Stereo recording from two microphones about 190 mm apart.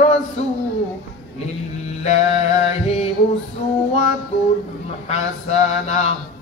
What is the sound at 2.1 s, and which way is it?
A man's voice, 35° left (ahead or behind).